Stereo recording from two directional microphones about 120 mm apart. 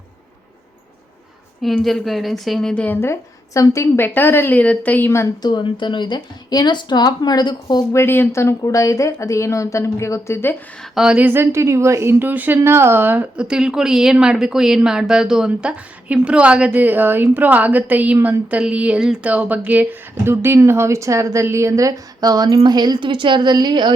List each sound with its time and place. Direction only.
1.8 s a woman's voice: centre (ahead or behind); by 5.3 s 20° left (ahead or behind)
5.4 s a woman's voice: 35° left (ahead or behind)
7.9 s a woman's voice: 20° left (ahead or behind)
10.9 s a woman's voice: 5° right (ahead or behind)
11.3 s a woman's voice: 20° right (ahead or behind); by 23.9 s 40° right (ahead or behind)